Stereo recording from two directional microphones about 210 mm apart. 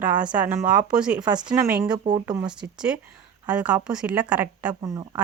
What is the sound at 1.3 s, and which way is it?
A woman's voice, 20° right (ahead or behind).